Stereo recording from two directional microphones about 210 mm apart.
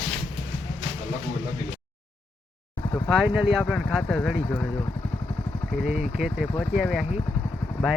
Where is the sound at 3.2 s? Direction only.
5° right (ahead or behind).